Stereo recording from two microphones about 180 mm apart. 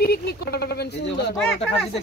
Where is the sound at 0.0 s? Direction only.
60° left (ahead or behind).